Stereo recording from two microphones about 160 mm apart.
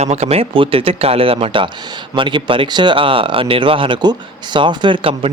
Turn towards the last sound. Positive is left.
turn(degrees=-35)  # may be behind; listen again after turning